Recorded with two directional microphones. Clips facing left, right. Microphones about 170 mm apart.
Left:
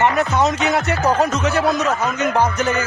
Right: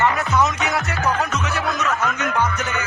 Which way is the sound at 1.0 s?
40° left (ahead or behind).